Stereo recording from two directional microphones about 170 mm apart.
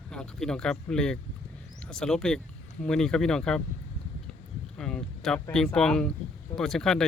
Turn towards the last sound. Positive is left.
turn(degrees=5)  # may be behind; listen again after turning